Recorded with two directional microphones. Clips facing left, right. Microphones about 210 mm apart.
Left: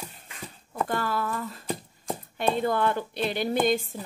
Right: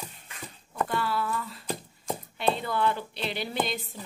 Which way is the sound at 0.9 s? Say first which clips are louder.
Left 1 dB; 45° left (ahead or behind).